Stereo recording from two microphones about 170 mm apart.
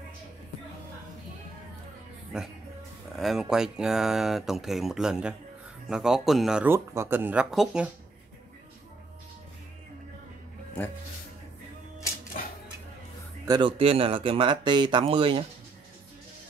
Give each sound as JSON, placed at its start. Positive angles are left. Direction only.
{"t": 2.3, "sound": "speech", "side_deg": -5}
{"t": 12.4, "sound": "a sound", "side_deg": 55}
{"t": 13.5, "sound": "speech", "side_deg": -30}